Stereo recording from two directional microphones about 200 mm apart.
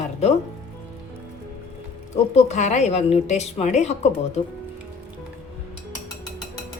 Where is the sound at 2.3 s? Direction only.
35° left (ahead or behind).